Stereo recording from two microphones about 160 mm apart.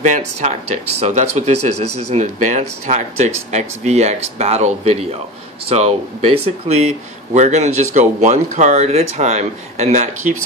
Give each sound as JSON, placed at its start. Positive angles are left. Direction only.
{"t": 0.0, "sound": "speech", "side_deg": -45}